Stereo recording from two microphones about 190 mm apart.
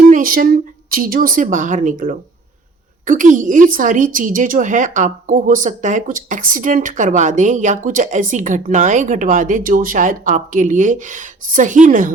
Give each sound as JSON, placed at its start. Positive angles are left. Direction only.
{"t": 0.1, "sound": "a woman's voice", "side_deg": -45}